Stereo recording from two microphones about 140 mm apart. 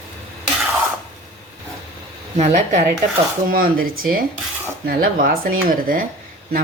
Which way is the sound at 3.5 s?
90° right.